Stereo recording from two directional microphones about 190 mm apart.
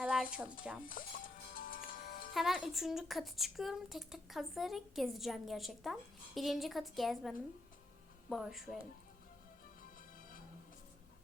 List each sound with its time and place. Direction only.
0.0 s music: 5° right (ahead or behind)
1.0 s speech: 50° left (ahead or behind)
1.5 s music: 50° left (ahead or behind)
2.3 s speech: centre (ahead or behind)